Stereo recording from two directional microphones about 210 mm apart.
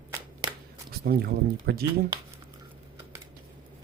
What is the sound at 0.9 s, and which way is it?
Speech, 45° right (ahead or behind).